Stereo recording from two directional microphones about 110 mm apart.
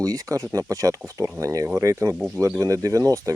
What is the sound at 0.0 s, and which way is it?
Speech, 30° right (ahead or behind).